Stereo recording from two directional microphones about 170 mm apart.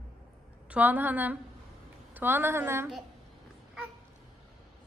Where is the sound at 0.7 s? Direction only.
10° right (ahead or behind).